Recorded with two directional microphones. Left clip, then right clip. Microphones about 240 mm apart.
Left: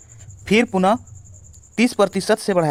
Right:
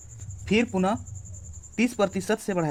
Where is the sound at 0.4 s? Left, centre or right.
Left.